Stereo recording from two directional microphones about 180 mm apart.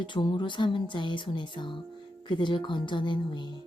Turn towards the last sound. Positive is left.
turn(degrees=25)  # may be behind; listen again after turning